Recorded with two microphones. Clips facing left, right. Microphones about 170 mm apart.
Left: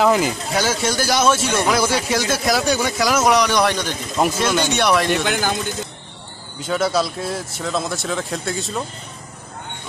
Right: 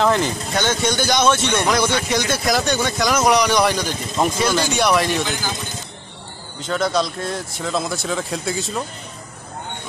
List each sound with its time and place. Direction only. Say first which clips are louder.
0.0 s speech: left 1 dB; 5° left (ahead or behind)
5.2 s a man's voice: left 4 dB; 65° left (ahead or behind)
6.6 s speech: left 1 dB; 5° left (ahead or behind)